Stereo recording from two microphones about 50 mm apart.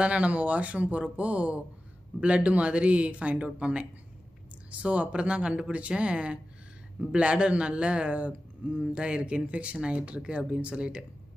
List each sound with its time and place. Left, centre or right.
0.0 s a man's voice: right